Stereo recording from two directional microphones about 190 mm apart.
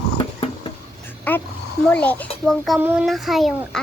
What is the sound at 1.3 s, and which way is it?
Speech, 10° left (ahead or behind).